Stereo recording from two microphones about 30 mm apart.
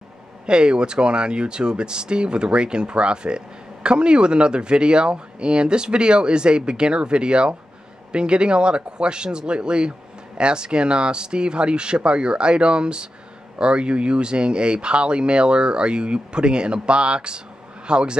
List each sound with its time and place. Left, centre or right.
0.5 s speech: right